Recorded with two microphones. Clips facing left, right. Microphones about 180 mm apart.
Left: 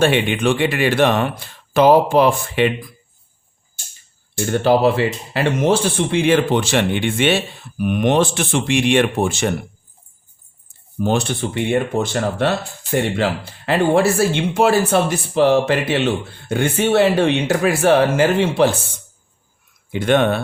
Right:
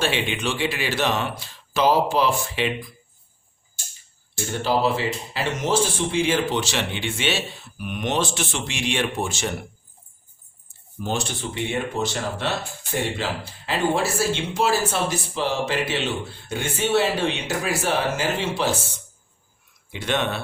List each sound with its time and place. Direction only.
0.0 s speech: 55° left (ahead or behind)
4.4 s speech: 60° left (ahead or behind)
10.7 s speech: 60° left (ahead or behind)
19.9 s speech: 50° left (ahead or behind)